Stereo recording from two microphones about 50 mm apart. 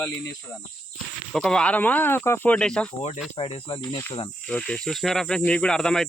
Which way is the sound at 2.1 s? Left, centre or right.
Left.